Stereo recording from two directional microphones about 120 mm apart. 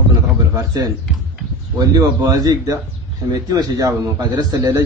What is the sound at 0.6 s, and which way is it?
A man's voice, 30° right (ahead or behind).